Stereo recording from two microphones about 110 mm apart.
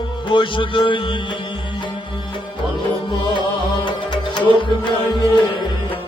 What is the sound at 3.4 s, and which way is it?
Music, 50° left (ahead or behind).